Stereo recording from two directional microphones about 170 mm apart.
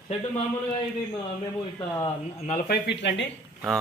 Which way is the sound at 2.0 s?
35° left (ahead or behind).